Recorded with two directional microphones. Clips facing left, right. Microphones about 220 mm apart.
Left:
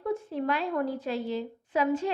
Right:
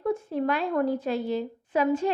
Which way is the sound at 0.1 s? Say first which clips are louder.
Right 3 dB; 50° right (ahead or behind).